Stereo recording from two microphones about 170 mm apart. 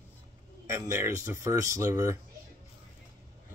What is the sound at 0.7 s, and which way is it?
Speech, 15° right (ahead or behind).